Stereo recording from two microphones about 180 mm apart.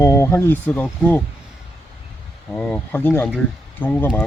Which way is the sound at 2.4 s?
5° left (ahead or behind).